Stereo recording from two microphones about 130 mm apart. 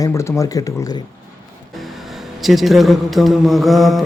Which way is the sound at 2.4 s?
Centre (ahead or behind).